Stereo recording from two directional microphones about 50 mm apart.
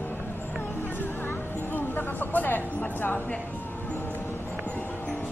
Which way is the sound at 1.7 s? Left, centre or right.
Left.